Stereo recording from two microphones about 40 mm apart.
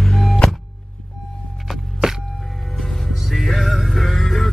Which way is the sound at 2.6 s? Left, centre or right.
Centre.